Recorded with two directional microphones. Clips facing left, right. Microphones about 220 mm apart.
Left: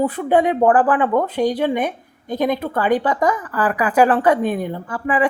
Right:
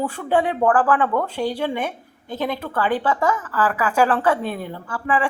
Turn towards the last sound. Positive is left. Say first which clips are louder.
# left 3 dB
turn(degrees=20)  # may be behind; listen again after turning